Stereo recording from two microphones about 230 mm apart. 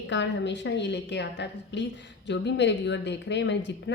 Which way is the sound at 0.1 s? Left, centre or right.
Left.